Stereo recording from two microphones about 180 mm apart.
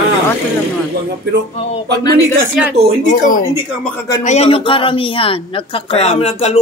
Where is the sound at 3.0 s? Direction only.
45° left (ahead or behind).